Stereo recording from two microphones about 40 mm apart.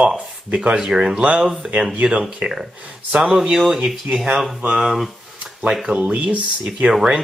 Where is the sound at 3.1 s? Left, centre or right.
Centre.